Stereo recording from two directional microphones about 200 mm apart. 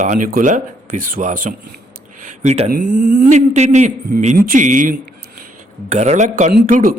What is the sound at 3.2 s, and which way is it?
A man's voice, 35° right (ahead or behind).